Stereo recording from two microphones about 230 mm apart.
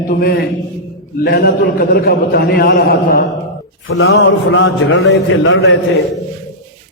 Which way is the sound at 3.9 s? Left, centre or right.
Left.